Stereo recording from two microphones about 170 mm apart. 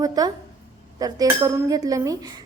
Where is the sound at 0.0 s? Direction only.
20° right (ahead or behind).